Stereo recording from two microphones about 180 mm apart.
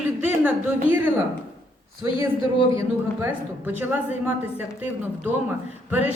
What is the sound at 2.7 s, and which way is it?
A woman's voice, 15° right (ahead or behind).